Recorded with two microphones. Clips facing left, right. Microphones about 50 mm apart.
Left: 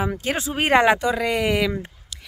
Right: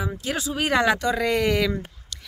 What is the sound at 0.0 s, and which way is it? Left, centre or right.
Speech, left.